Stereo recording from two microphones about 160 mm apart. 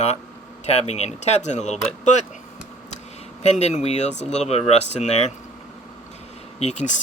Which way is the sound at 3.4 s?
45° left (ahead or behind).